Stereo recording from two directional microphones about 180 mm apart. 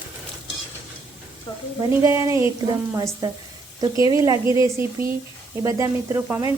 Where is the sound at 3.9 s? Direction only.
25° left (ahead or behind).